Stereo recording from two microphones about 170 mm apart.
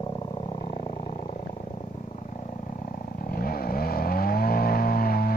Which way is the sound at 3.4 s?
60° left (ahead or behind).